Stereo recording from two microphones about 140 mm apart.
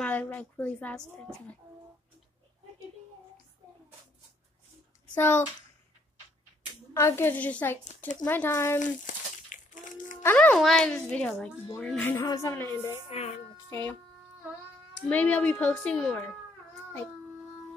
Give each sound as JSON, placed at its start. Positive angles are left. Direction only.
{"t": 0.0, "sound": "speech", "side_deg": 10}
{"t": 6.9, "sound": "speech", "side_deg": 20}
{"t": 8.7, "sound": "a sound", "side_deg": 65}
{"t": 10.2, "sound": "speech", "side_deg": 10}
{"t": 12.3, "sound": "music", "side_deg": 20}
{"t": 13.1, "sound": "speech", "side_deg": 50}
{"t": 13.7, "sound": "speech", "side_deg": 15}
{"t": 15.0, "sound": "speech", "side_deg": 10}